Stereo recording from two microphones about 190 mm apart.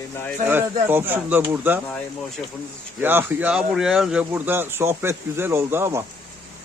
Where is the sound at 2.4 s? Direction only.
Centre (ahead or behind).